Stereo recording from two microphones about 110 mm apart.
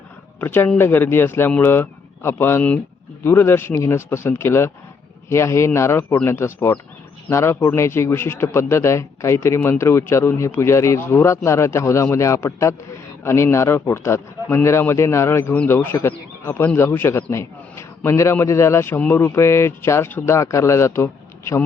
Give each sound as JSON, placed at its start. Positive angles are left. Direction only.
{"t": 0.3, "sound": "a man's voice", "side_deg": 20}